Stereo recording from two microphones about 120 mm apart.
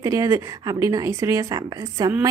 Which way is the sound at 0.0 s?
25° right (ahead or behind).